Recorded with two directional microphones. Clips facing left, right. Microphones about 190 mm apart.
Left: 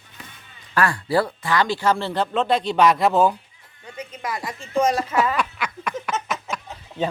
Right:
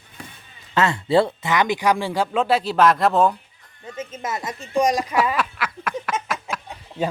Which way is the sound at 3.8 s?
25° right (ahead or behind).